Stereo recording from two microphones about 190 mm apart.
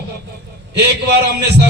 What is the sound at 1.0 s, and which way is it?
Speech, 60° right (ahead or behind).